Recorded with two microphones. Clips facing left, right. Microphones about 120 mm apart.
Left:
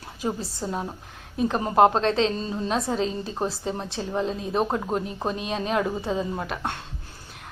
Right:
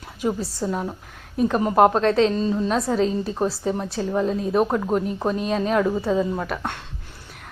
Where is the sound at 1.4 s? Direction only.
25° left (ahead or behind).